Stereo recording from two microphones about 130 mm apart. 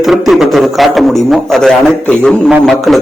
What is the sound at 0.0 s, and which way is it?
A man's voice, centre (ahead or behind).